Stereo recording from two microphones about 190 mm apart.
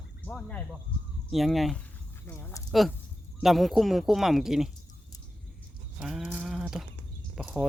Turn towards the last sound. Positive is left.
turn(degrees=-5)  # may be behind; listen again after turning